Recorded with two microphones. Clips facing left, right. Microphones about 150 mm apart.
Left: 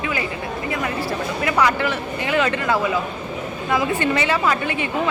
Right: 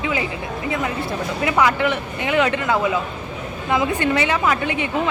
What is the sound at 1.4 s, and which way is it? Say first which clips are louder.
A woman's voice: right 2 dB; 20° right (ahead or behind).